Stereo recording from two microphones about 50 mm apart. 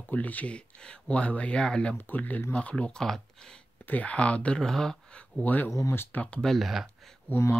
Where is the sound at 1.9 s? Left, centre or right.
Left.